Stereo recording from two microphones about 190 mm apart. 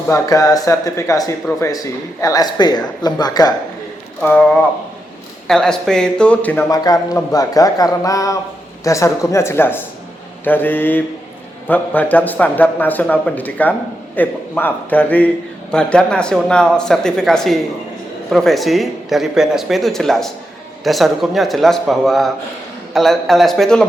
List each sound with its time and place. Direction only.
0.1 s a man's voice: 20° left (ahead or behind)
4.2 s a man's voice: 5° left (ahead or behind)
6.7 s a man's voice: 20° left (ahead or behind); by 23.8 s 5° left (ahead or behind)